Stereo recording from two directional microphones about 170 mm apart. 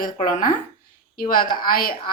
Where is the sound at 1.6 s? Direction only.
60° left (ahead or behind).